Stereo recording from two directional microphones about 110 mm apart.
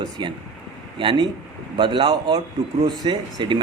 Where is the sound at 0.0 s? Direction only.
45° right (ahead or behind).